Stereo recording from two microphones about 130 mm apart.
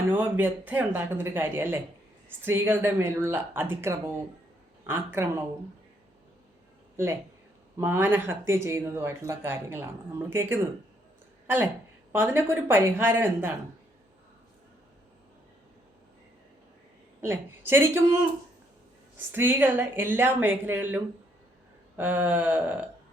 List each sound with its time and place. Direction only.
0.1 s speech: 15° right (ahead or behind)
6.9 s speech: 20° right (ahead or behind)
17.2 s speech: 20° right (ahead or behind)
19.3 s speech: 15° right (ahead or behind)